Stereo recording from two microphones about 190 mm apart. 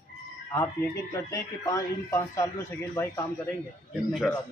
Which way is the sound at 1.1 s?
15° left (ahead or behind).